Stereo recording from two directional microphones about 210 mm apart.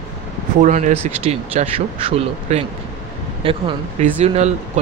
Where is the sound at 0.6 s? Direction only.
35° right (ahead or behind).